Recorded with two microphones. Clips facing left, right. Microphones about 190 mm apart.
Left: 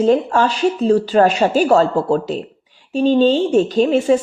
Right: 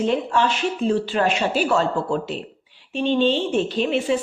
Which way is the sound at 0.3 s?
35° left (ahead or behind).